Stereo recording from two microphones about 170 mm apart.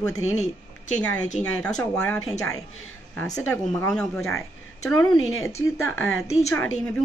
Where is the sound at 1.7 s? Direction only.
5° left (ahead or behind).